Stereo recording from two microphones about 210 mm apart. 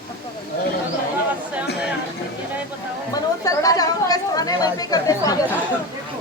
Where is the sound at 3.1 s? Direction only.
15° left (ahead or behind).